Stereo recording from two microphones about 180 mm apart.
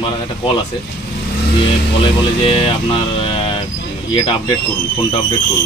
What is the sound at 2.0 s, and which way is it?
Speech, 30° left (ahead or behind).